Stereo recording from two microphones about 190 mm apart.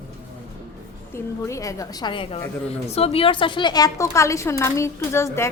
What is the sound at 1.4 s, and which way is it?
A woman's voice, 15° left (ahead or behind).